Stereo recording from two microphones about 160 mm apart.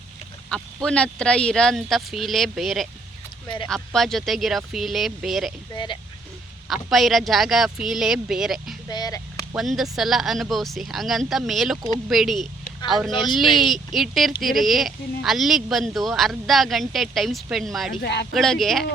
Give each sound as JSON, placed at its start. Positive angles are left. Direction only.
{"t": 0.5, "sound": "speech", "side_deg": 5}
{"t": 3.4, "sound": "speech", "side_deg": 30}
{"t": 3.9, "sound": "speech", "side_deg": 0}
{"t": 5.7, "sound": "speech", "side_deg": 30}
{"t": 6.9, "sound": "speech", "side_deg": 0}
{"t": 8.9, "sound": "speech", "side_deg": 25}
{"t": 9.6, "sound": "speech", "side_deg": 0}
{"t": 18.0, "sound": "speech", "side_deg": 90}
{"t": 18.3, "sound": "speech", "side_deg": 0}